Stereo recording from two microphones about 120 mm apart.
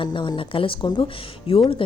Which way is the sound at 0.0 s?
40° left (ahead or behind).